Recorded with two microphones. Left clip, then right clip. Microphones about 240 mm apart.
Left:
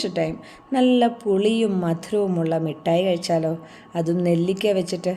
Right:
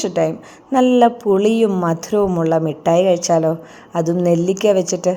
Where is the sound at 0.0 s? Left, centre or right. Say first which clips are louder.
Right 6 dB; centre.